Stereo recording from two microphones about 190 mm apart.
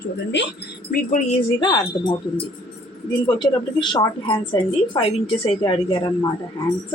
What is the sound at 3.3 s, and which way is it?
Speech, 25° left (ahead or behind).